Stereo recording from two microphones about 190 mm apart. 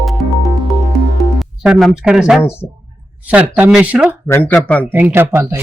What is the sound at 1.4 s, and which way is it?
Speech, centre (ahead or behind).